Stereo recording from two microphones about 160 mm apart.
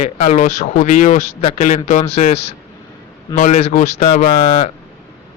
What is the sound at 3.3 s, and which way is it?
Speech, 55° left (ahead or behind).